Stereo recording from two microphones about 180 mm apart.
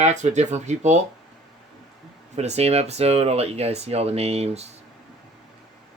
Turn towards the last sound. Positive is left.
turn(degrees=-35)  # may be behind; listen again after turning